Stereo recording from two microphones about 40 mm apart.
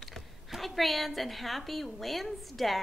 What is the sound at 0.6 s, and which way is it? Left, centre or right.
A woman's voice, centre.